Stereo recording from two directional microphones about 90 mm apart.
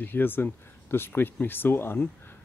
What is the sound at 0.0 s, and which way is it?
Speech, 25° left (ahead or behind).